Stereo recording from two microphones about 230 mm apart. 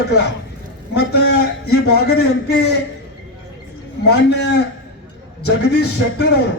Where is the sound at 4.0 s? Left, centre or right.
Left.